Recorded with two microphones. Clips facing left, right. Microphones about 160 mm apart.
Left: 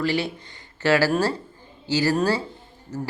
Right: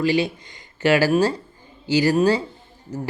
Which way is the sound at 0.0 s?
15° right (ahead or behind).